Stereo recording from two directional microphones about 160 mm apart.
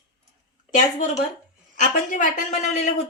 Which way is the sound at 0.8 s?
50° left (ahead or behind).